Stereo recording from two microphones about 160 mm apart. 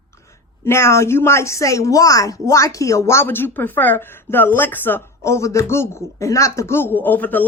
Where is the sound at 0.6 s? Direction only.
15° left (ahead or behind).